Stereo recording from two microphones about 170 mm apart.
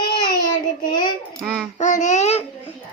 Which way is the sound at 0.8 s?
25° left (ahead or behind).